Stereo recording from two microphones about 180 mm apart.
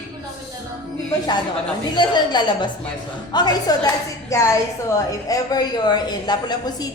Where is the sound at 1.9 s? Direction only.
25° left (ahead or behind).